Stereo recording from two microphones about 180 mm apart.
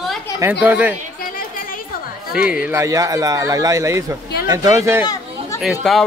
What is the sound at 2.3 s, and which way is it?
Speech, 5° right (ahead or behind).